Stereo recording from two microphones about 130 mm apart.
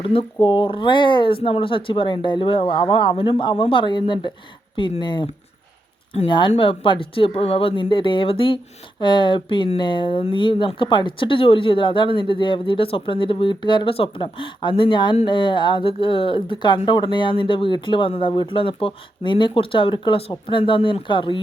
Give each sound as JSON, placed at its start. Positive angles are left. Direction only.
{"t": 0.0, "sound": "speech", "side_deg": 45}
{"t": 6.2, "sound": "speech", "side_deg": 40}